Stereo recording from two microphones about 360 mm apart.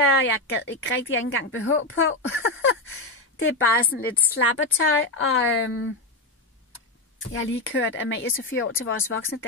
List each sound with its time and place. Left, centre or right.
0.0 s speech: left
7.2 s speech: left